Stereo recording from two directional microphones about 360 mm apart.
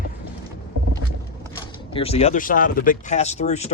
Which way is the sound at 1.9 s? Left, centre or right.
Centre.